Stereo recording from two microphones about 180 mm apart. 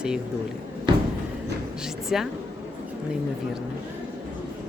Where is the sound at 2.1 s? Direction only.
Centre (ahead or behind).